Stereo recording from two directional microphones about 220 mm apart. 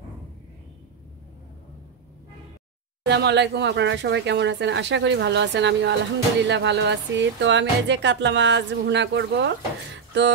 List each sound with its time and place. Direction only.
3.1 s speech: 50° right (ahead or behind)